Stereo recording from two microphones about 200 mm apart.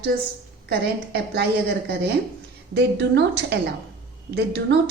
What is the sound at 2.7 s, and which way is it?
A woman's voice, 55° right (ahead or behind).